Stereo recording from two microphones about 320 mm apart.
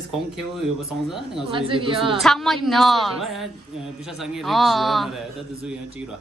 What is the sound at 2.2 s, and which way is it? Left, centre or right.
A man's voice, centre.